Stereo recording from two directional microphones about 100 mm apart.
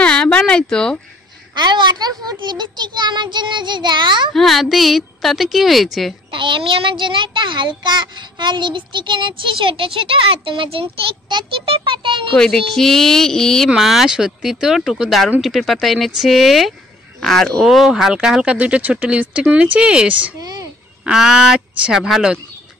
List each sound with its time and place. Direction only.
0.0 s a sound: 10° left (ahead or behind)
1.5 s child singing: 50° right (ahead or behind)
4.3 s a woman's voice: centre (ahead or behind)
6.3 s a child's voice: 55° right (ahead or behind)
12.4 s a woman's voice: 5° left (ahead or behind); by 20.3 s 15° right (ahead or behind)
20.3 s speech: 40° right (ahead or behind)
21.0 s speech: 5° right (ahead or behind)